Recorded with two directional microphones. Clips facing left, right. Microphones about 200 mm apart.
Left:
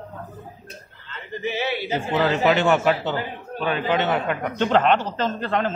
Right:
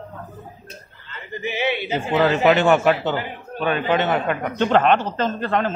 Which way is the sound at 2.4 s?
55° right (ahead or behind).